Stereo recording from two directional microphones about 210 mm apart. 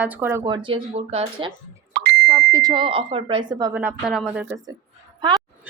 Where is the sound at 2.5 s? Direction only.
20° right (ahead or behind).